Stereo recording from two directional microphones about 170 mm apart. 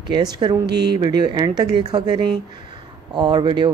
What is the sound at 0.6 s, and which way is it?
Speech, 75° right (ahead or behind).